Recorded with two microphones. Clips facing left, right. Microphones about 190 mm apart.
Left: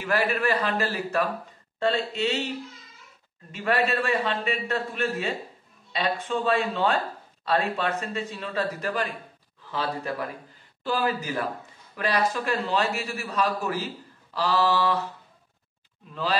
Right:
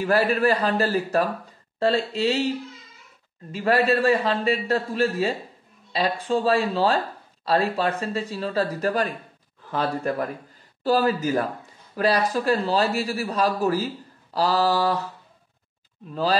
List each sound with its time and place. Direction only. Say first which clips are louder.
0.0 s a man's voice: right 5 dB; 35° right (ahead or behind)
3.5 s a man's voice: right 4 dB; 35° right (ahead or behind)
9.7 s a man's voice: right 5 dB; 50° right (ahead or behind)